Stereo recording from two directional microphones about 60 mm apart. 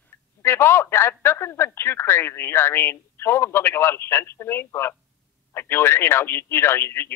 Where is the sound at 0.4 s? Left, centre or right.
Left.